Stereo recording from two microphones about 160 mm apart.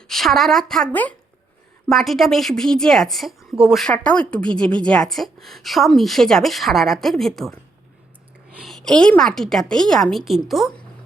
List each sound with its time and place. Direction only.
0.1 s a woman's voice: centre (ahead or behind)